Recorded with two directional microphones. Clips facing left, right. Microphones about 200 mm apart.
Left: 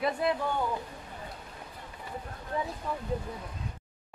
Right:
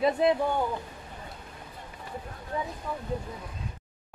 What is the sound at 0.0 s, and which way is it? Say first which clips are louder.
Speech: right 5 dB; 20° right (ahead or behind).